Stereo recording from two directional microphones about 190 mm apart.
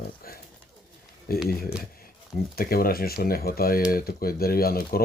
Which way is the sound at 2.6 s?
50° left (ahead or behind).